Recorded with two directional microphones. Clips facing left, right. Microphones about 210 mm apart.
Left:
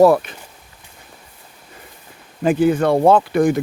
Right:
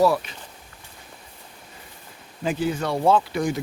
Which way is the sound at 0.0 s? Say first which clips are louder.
Left 8 dB; 55° left (ahead or behind).